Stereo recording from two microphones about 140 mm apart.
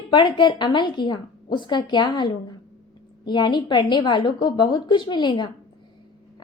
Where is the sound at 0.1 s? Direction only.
35° left (ahead or behind).